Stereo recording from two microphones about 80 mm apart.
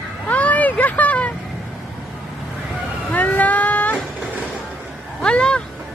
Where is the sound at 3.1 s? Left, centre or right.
Centre.